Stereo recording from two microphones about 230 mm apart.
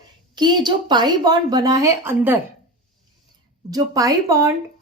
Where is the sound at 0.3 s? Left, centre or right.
Centre.